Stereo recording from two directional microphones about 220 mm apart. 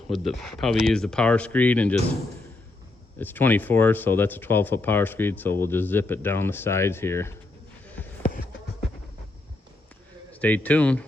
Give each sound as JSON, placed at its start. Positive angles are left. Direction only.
{"t": 0.1, "sound": "speech", "side_deg": 0}
{"t": 3.2, "sound": "speech", "side_deg": 10}
{"t": 8.2, "sound": "a sound", "side_deg": 40}
{"t": 10.4, "sound": "speech", "side_deg": 5}